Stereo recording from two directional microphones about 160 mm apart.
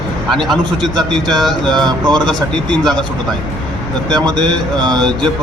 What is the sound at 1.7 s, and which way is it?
Speech, 25° right (ahead or behind).